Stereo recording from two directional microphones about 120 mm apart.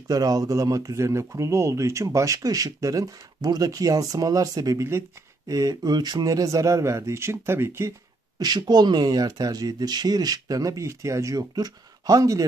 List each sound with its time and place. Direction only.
0.1 s speech: 30° right (ahead or behind)
8.4 s speech: 35° right (ahead or behind)